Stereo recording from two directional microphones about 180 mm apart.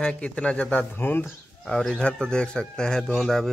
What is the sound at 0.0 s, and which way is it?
Speech, 5° left (ahead or behind).